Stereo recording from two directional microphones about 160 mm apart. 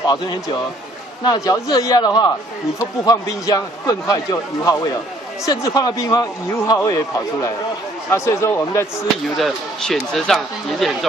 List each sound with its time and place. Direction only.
0.0 s a man's voice: 25° left (ahead or behind)
8.1 s speech: 15° left (ahead or behind)
9.4 s speech: centre (ahead or behind)